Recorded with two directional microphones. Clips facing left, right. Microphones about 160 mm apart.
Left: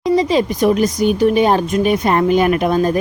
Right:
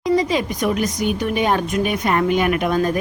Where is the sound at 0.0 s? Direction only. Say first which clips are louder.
Left 4 dB; 30° left (ahead or behind).